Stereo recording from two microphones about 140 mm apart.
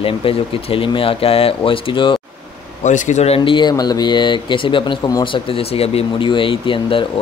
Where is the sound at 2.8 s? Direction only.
60° left (ahead or behind); by 5.3 s 25° left (ahead or behind).